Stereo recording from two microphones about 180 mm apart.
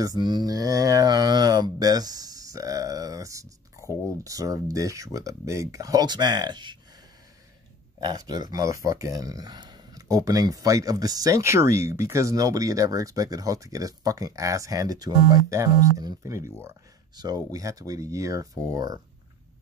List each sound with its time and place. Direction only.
0.0 s speech: 20° right (ahead or behind)
8.0 s speech: 20° right (ahead or behind)